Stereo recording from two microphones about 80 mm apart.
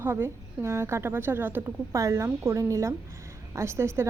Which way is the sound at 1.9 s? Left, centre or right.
Right.